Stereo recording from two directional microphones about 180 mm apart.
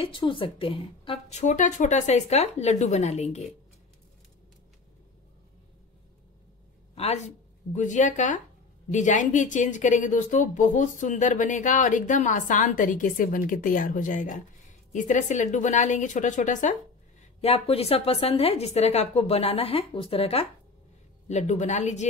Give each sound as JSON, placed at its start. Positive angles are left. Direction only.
{"t": 0.0, "sound": "a woman's voice", "side_deg": 30}
{"t": 7.7, "sound": "a woman's voice", "side_deg": 45}